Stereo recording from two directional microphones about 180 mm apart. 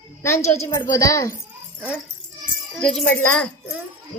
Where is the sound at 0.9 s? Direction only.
20° left (ahead or behind).